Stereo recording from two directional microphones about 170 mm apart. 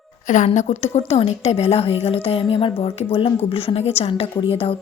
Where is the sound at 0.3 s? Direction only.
45° left (ahead or behind).